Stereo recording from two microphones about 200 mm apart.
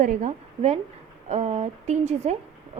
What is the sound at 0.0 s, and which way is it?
A woman's voice, 35° right (ahead or behind).